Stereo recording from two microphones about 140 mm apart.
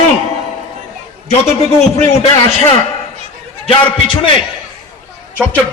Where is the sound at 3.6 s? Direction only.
35° left (ahead or behind).